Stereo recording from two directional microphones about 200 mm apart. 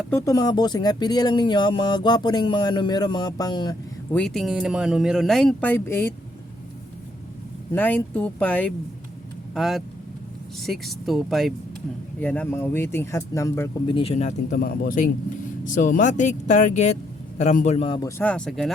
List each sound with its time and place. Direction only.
0.1 s speech: 15° left (ahead or behind)
4.1 s speech: 5° left (ahead or behind)
7.7 s speech: 10° left (ahead or behind); by 14.3 s 30° left (ahead or behind)
14.5 s speech: 45° left (ahead or behind); by 18.1 s 25° left (ahead or behind)
18.2 s speech: 5° left (ahead or behind)